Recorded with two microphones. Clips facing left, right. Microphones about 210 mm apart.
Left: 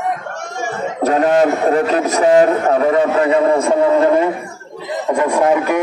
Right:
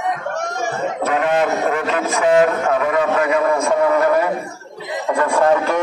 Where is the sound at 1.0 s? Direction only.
40° left (ahead or behind); by 5.7 s 15° left (ahead or behind).